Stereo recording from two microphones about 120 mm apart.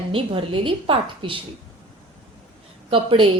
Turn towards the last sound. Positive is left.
turn(degrees=-50)  # may be behind; listen again after turning